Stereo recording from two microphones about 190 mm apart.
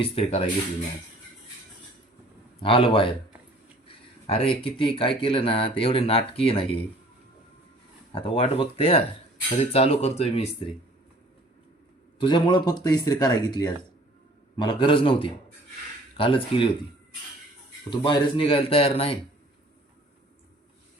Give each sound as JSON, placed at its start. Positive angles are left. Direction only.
{"t": 0.0, "sound": "speech", "side_deg": 30}
{"t": 2.6, "sound": "speech", "side_deg": 30}
{"t": 4.3, "sound": "speech", "side_deg": 30}
{"t": 8.1, "sound": "speech", "side_deg": 30}
{"t": 12.2, "sound": "speech", "side_deg": 25}
{"t": 17.9, "sound": "speech", "side_deg": 25}